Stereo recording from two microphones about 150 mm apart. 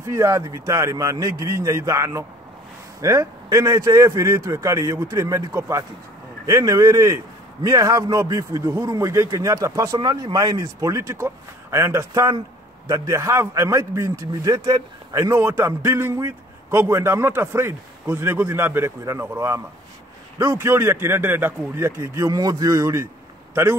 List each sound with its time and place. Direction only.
0.0 s a man's voice: 20° right (ahead or behind)